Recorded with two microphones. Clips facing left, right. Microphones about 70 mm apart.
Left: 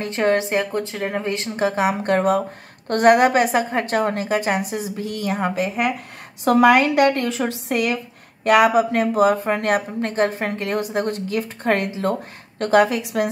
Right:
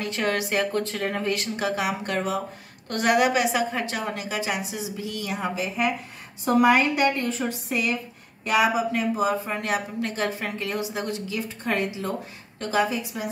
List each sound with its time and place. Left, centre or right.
0.0 s speech: left
0.7 s speech: centre
1.2 s speech: left
6.4 s a woman's voice: left